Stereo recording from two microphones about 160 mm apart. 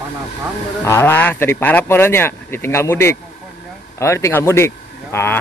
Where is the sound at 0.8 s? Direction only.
15° left (ahead or behind).